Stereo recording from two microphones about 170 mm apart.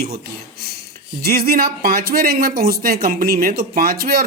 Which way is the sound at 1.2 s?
65° right (ahead or behind).